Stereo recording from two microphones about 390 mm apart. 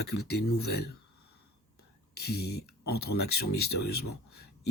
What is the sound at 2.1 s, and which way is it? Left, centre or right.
Speech, left.